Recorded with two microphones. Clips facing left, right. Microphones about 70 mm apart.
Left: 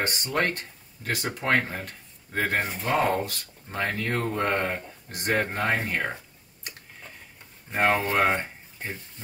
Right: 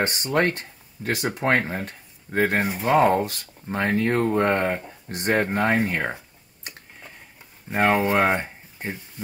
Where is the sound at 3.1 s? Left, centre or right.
Right.